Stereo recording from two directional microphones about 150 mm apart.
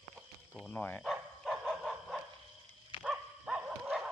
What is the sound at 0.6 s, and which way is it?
Speech, 10° left (ahead or behind).